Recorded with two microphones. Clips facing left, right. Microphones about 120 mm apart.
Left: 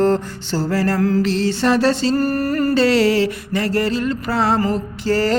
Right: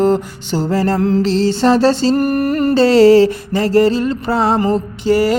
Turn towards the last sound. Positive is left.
turn(degrees=-15)  # may be behind; listen again after turning